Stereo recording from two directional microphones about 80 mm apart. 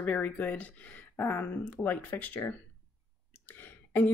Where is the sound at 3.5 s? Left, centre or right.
Left.